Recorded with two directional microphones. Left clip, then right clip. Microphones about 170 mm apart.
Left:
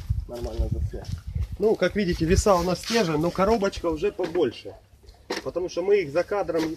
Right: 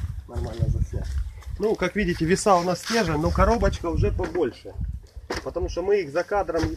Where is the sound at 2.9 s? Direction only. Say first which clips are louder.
Left 2 dB; 10° right (ahead or behind).